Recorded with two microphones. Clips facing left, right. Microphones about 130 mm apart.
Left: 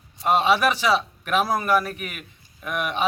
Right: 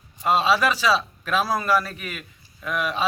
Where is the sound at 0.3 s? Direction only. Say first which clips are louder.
Left 1 dB; 20° left (ahead or behind).